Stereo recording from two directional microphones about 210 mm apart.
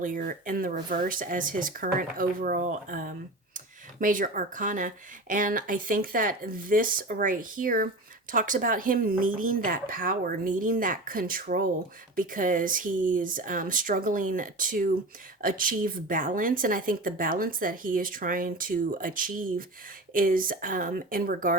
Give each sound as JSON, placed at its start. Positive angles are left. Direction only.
{"t": 0.0, "sound": "speech", "side_deg": -40}